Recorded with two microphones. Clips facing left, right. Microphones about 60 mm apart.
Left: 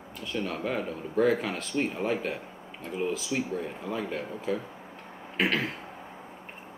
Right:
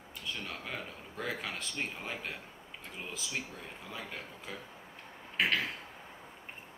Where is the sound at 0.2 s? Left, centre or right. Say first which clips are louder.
Left 10 dB; centre.